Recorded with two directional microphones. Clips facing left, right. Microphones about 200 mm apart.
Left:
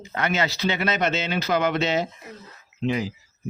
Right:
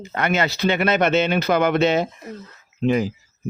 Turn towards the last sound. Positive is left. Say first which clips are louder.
# right 5 dB
turn(degrees=-50)  # may be behind; listen again after turning